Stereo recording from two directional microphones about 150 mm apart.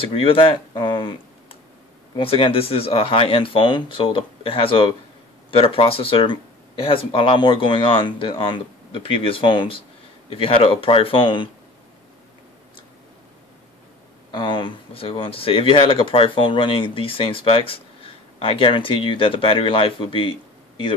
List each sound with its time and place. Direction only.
0.0 s speech: 35° left (ahead or behind)
14.3 s speech: 30° left (ahead or behind)